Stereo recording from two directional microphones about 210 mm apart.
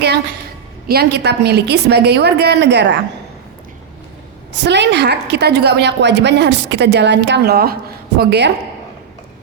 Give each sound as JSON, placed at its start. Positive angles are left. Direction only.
{"t": 0.9, "sound": "a woman's voice", "side_deg": -50}
{"t": 4.6, "sound": "a woman's voice", "side_deg": -55}